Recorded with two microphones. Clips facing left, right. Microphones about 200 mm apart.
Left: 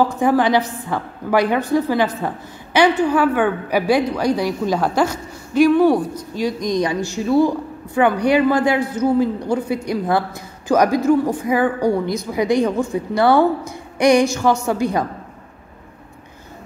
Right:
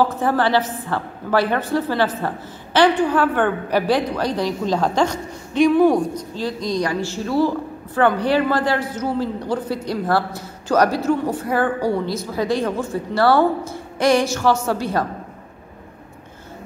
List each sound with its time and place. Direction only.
0.0 s a woman's voice: 15° left (ahead or behind)